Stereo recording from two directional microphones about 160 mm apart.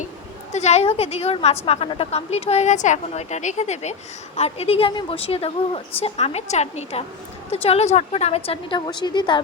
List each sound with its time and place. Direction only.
0.5 s a woman's voice: 45° left (ahead or behind)